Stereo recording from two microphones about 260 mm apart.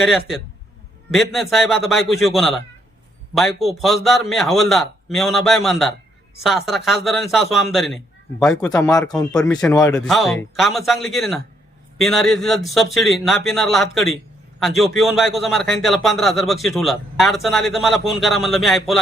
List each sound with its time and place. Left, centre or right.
0.0 s a man's voice: centre
9.3 s a man's voice: centre